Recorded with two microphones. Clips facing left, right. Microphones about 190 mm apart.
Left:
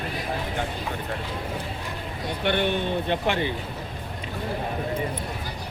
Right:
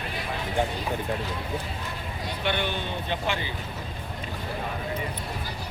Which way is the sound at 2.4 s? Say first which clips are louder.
Left 5 dB; 55° left (ahead or behind).